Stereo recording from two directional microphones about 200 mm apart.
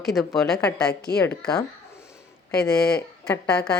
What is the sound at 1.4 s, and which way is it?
Speech, 15° left (ahead or behind).